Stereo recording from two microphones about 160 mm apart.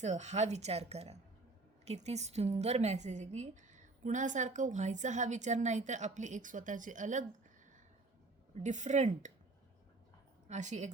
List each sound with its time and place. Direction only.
0.0 s a woman's voice: 45° right (ahead or behind)
8.6 s a woman's voice: 50° right (ahead or behind)
10.5 s a woman's voice: 50° right (ahead or behind)